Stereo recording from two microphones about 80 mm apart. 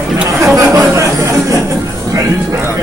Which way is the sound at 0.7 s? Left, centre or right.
Right.